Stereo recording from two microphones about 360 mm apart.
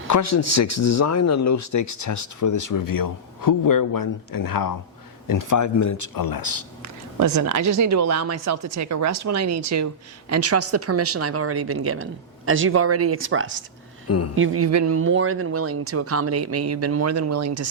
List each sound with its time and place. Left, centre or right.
0.1 s speech: left
6.2 s speech: left
6.8 s speech: right